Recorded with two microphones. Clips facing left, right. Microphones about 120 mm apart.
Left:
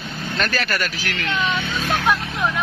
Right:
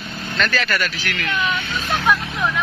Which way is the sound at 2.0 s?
5° left (ahead or behind).